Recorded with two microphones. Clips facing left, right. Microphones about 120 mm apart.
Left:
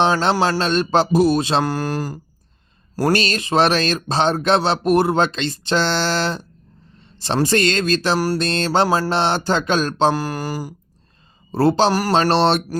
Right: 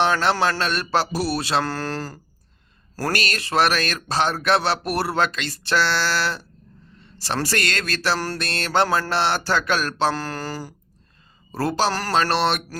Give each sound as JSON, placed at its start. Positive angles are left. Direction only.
{"t": 0.0, "sound": "speech", "side_deg": 20}
{"t": 11.5, "sound": "speech", "side_deg": 25}